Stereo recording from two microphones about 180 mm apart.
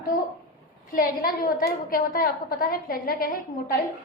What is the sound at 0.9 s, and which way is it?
A woman's voice, 50° left (ahead or behind).